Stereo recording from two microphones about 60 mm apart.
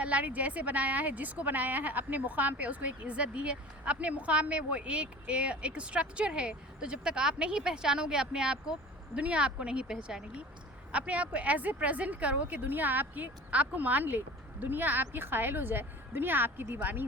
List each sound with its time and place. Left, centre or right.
0.0 s speech: right